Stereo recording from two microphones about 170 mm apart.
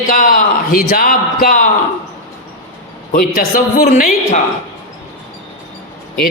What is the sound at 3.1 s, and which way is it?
A man's voice, 55° left (ahead or behind).